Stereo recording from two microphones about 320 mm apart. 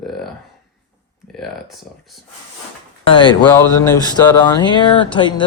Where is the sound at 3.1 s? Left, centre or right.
Centre.